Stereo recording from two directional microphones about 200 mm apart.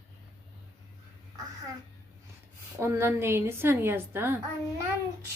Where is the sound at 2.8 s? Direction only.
15° right (ahead or behind).